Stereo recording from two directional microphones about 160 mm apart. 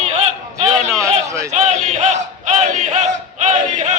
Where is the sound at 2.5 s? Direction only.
45° right (ahead or behind).